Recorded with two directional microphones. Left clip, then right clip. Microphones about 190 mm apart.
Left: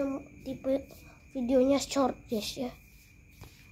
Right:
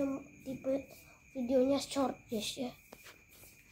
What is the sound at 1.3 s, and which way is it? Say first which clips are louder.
A woman's voice: left 5 dB; 25° left (ahead or behind).